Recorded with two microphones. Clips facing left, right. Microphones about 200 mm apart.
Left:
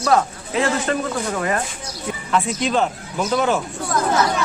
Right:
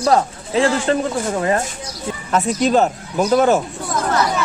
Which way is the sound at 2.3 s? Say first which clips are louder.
Right 4 dB; 45° right (ahead or behind).